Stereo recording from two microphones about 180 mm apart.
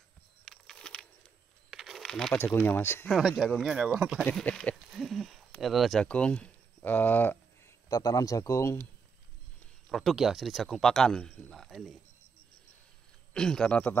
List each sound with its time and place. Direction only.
0.5 s a sound: 5° left (ahead or behind)
2.3 s speech: 15° left (ahead or behind)
3.1 s speech: centre (ahead or behind)
4.3 s a sound: 5° left (ahead or behind)
5.6 s speech: centre (ahead or behind); by 8.8 s 15° left (ahead or behind)
9.8 s speech: centre (ahead or behind)
13.3 s speech: 5° left (ahead or behind)